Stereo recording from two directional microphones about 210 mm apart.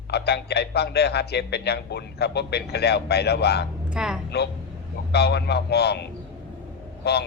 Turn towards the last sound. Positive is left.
turn(degrees=50)  # may be behind; listen again after turning